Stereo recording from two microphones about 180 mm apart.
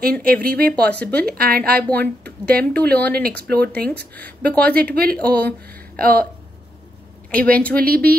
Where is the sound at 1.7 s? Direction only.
10° left (ahead or behind).